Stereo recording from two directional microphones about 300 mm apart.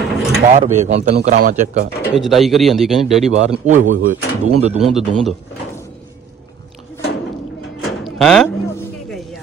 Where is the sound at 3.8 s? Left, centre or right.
Right.